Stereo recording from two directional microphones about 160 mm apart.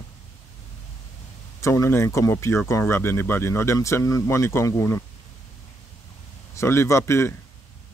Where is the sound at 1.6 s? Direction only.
15° left (ahead or behind).